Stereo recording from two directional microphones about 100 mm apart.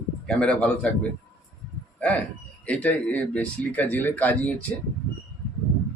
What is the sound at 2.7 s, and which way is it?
Speech, 15° left (ahead or behind).